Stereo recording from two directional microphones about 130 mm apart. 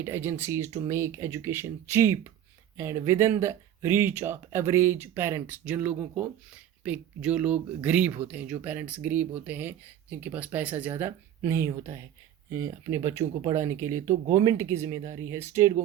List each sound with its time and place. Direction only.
0.0 s speech: 20° right (ahead or behind)